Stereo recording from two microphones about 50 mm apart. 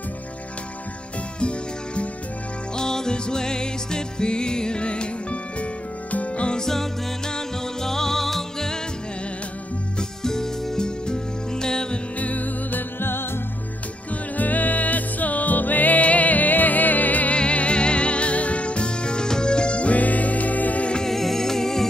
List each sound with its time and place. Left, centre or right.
1.4 s music: left
6.6 s music: centre
9.9 s music: centre
12.2 s music: left
13.0 s music: left
14.3 s music: left
17.4 s music: left
20.9 s music: centre